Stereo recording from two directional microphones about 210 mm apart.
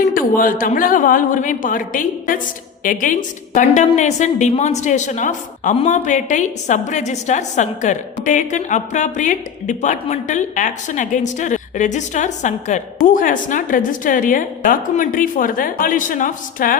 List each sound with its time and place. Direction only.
0.0 s a woman's voice: 40° left (ahead or behind)